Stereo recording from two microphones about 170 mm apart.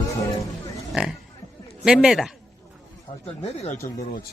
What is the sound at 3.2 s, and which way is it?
Speech, 40° left (ahead or behind).